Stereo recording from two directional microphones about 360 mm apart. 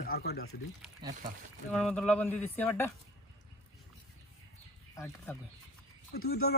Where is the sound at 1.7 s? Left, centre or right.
Centre.